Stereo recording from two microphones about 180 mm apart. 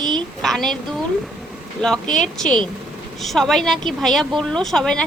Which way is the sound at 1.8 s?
5° left (ahead or behind).